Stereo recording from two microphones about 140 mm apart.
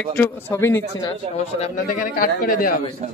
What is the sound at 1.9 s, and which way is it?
Speech, 75° left (ahead or behind).